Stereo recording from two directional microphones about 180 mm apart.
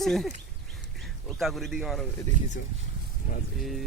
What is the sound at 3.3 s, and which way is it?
Vehicle, 50° left (ahead or behind).